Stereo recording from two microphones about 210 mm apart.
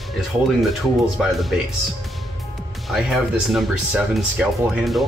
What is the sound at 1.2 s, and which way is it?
Speech, centre (ahead or behind).